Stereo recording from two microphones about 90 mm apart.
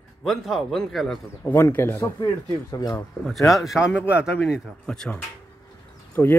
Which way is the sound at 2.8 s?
50° left (ahead or behind).